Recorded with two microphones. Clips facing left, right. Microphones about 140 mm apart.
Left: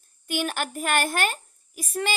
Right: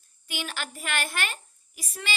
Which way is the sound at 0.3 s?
50° left (ahead or behind).